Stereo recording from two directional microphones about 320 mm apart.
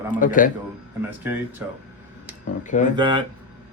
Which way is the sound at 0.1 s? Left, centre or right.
Left.